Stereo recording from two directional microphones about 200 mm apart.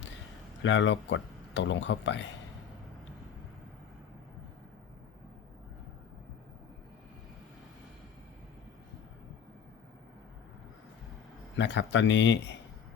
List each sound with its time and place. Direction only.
0.6 s speech: 65° left (ahead or behind)
11.5 s speech: 65° left (ahead or behind)